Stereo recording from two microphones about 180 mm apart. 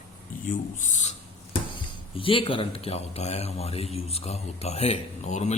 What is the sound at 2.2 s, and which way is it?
Speech, 30° left (ahead or behind).